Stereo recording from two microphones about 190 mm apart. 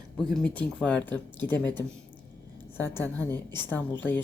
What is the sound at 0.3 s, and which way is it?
A woman's voice, 5° left (ahead or behind).